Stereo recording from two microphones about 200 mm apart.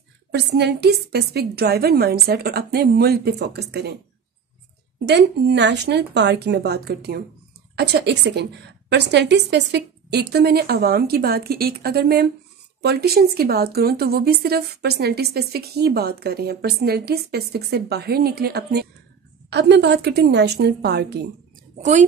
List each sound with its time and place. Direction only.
0.3 s a woman's voice: 55° right (ahead or behind)
4.9 s a woman's voice: 60° right (ahead or behind)